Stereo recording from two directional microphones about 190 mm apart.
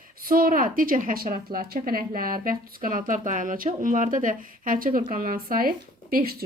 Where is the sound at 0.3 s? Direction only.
50° right (ahead or behind).